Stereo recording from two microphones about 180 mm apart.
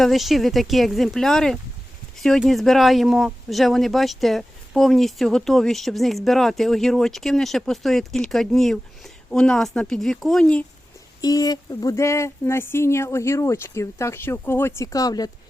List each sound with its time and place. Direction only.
0.0 s speech: centre (ahead or behind)
11.2 s speech: 20° left (ahead or behind)